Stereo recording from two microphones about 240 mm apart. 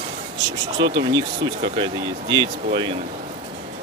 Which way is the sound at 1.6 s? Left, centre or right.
Right.